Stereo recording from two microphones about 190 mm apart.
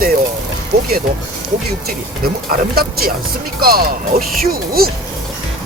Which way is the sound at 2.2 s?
50° right (ahead or behind).